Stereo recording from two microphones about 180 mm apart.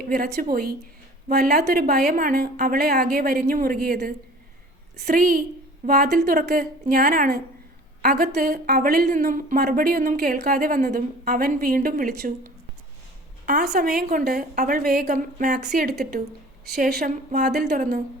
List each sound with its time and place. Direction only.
0.1 s a woman's voice: 55° right (ahead or behind)